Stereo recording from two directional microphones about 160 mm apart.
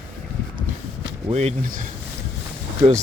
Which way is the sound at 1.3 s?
45° right (ahead or behind).